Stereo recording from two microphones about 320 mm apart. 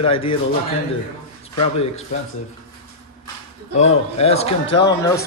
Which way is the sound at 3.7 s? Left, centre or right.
Centre.